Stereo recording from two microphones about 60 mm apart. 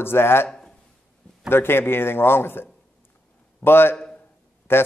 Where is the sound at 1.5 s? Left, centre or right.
Left.